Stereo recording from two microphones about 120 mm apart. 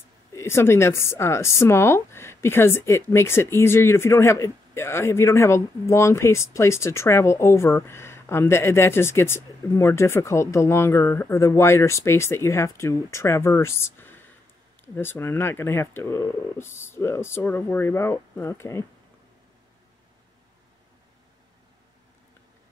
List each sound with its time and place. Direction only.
0.4 s speech: 20° left (ahead or behind)